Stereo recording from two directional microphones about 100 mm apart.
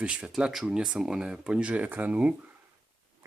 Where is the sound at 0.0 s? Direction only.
10° right (ahead or behind).